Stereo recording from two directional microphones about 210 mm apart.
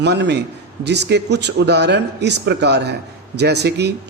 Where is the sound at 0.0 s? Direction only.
55° right (ahead or behind).